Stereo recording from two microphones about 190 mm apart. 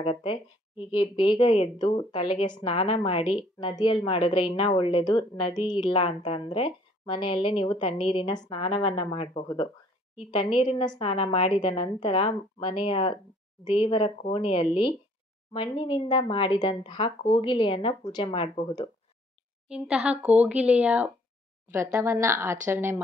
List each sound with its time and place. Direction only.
0.0 s a woman's voice: 30° left (ahead or behind)
19.7 s speech: 5° right (ahead or behind)